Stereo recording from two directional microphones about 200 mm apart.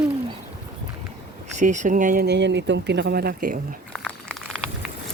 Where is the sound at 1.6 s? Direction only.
40° right (ahead or behind).